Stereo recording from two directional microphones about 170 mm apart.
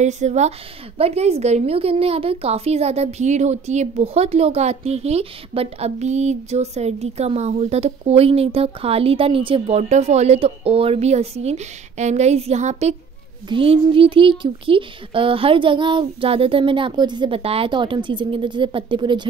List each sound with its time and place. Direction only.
0.0 s a woman's voice: 40° right (ahead or behind)